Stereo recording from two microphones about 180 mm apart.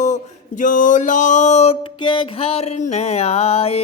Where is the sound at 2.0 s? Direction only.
25° left (ahead or behind).